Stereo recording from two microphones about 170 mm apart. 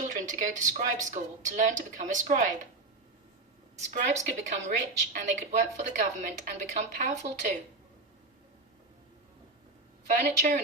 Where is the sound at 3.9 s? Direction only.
45° right (ahead or behind).